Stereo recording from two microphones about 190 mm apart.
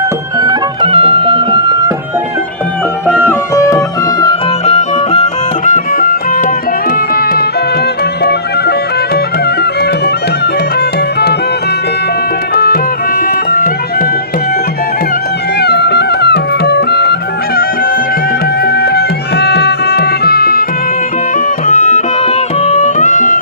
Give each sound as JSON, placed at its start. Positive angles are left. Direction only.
{"t": 0.3, "sound": "music", "side_deg": -25}
{"t": 3.5, "sound": "music", "side_deg": 15}
{"t": 5.6, "sound": "music", "side_deg": 45}
{"t": 10.4, "sound": "music", "side_deg": 60}
{"t": 12.5, "sound": "music", "side_deg": 50}
{"t": 15.6, "sound": "music", "side_deg": 60}
{"t": 18.6, "sound": "music", "side_deg": 55}
{"t": 21.3, "sound": "music", "side_deg": 40}